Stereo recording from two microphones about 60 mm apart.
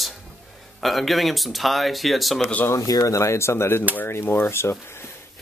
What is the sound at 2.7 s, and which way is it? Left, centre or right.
Speech, left.